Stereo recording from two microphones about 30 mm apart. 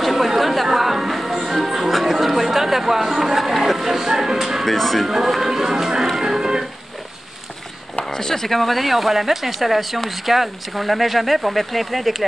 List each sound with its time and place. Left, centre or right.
0.0 s chatter: centre
0.7 s music: centre
4.6 s speech: centre
5.0 s speech: centre
5.4 s music: centre
8.0 s speech: centre
8.5 s speech: centre